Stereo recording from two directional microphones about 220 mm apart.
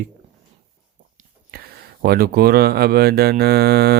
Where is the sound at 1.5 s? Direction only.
45° right (ahead or behind).